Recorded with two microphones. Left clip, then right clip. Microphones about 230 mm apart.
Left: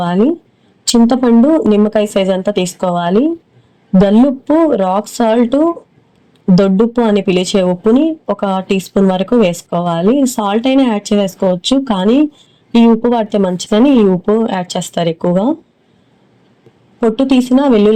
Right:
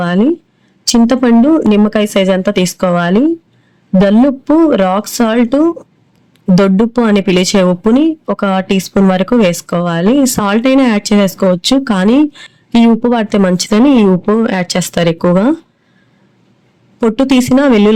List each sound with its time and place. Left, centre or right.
0.0 s speech: right
17.0 s speech: right